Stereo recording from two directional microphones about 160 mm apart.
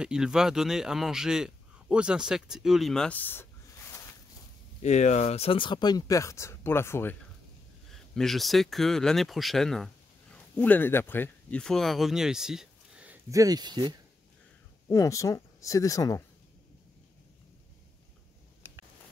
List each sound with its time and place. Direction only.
0.0 s speech: 5° right (ahead or behind); by 3.4 s 10° left (ahead or behind)
4.8 s speech: 45° left (ahead or behind); by 7.2 s 15° left (ahead or behind)
7.9 s speech: centre (ahead or behind)
13.3 s speech: 20° right (ahead or behind)
14.9 s speech: 20° left (ahead or behind)